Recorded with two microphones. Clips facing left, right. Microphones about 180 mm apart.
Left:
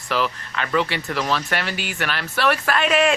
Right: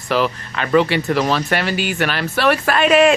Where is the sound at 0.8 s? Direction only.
70° right (ahead or behind).